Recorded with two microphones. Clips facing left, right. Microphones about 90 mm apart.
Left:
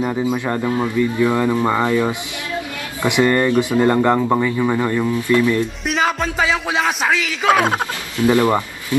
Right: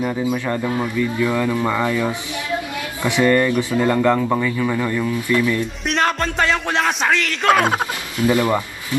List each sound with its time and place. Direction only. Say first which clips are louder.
0.3 s speech: left 1 dB; 20° left (ahead or behind)
5.9 s speech: right 2 dB; centre (ahead or behind)
8.2 s speech: left 2 dB; 25° left (ahead or behind)